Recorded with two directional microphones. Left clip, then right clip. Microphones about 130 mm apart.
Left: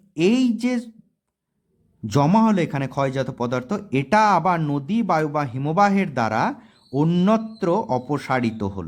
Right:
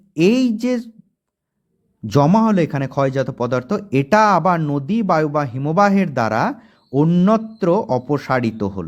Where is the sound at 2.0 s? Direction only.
15° right (ahead or behind).